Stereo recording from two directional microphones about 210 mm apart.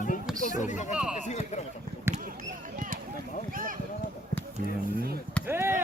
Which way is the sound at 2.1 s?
10° right (ahead or behind).